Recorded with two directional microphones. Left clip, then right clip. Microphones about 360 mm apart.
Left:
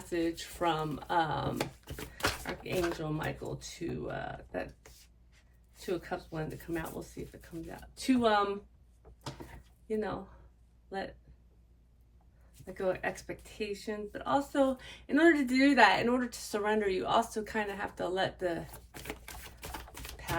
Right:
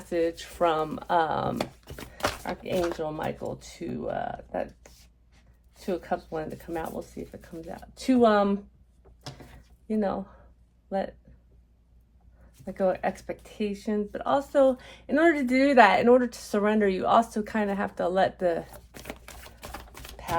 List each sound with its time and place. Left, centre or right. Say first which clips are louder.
0.1 s speech: right 7 dB; centre
7.9 s speech: right 7 dB; centre
9.9 s speech: right 6 dB; centre
12.7 s speech: right 7 dB; centre
18.9 s typewriter: right 2 dB; centre